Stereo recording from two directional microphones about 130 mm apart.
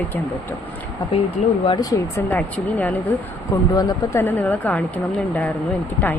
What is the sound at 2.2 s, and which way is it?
Speech, 15° left (ahead or behind).